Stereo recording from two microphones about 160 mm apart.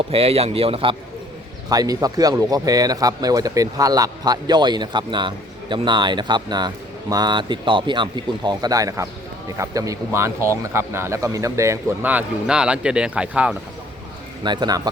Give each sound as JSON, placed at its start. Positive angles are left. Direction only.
{"t": 0.1, "sound": "speech", "side_deg": -40}
{"t": 1.7, "sound": "speech", "side_deg": -20}
{"t": 14.4, "sound": "speech", "side_deg": -25}